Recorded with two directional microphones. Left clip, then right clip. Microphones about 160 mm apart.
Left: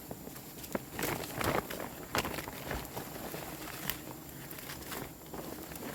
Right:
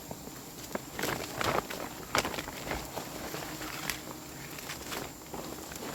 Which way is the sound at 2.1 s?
35° left (ahead or behind).